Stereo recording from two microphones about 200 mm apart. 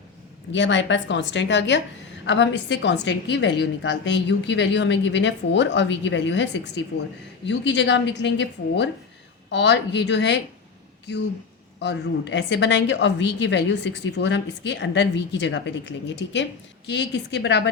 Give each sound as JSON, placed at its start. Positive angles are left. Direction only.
{"t": 0.5, "sound": "a woman's voice", "side_deg": 65}